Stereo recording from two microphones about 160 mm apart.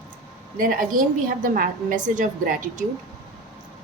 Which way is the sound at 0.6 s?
60° right (ahead or behind).